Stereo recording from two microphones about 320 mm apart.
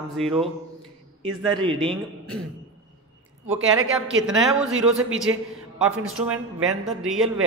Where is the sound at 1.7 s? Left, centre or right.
Centre.